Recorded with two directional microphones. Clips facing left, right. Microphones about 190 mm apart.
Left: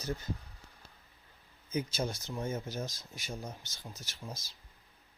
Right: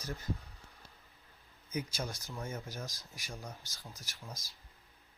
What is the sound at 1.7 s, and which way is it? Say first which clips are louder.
Speech: left 4 dB; 25° left (ahead or behind).